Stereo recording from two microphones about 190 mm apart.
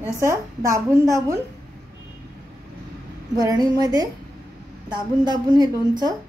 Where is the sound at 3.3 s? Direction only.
20° right (ahead or behind).